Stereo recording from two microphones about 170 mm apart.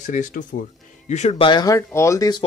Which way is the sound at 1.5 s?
20° left (ahead or behind).